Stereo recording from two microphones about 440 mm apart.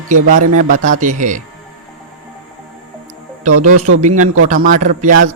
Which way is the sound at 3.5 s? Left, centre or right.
Right.